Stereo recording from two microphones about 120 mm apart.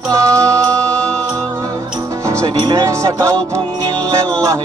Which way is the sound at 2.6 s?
35° right (ahead or behind).